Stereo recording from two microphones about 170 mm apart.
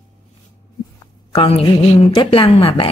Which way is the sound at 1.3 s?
35° left (ahead or behind).